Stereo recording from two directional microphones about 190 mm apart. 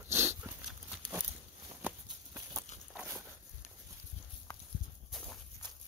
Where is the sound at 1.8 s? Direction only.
10° right (ahead or behind).